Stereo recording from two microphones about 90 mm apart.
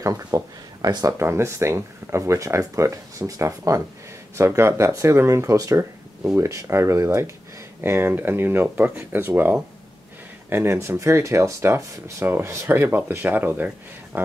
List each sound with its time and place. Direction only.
0.0 s speech: 40° right (ahead or behind)
1.2 s speech: 30° right (ahead or behind)